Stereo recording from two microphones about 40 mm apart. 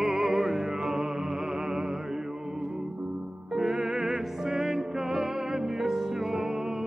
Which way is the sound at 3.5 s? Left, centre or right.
Centre.